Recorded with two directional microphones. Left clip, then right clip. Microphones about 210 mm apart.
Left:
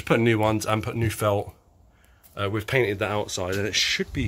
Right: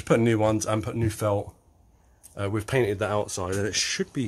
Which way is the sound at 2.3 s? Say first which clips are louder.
Left 2 dB; 10° right (ahead or behind).